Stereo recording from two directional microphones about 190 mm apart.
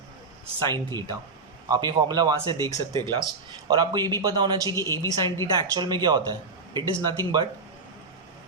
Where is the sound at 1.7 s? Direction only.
20° right (ahead or behind).